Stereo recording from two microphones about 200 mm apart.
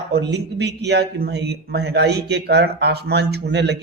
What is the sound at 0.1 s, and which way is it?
A man's voice, 60° right (ahead or behind).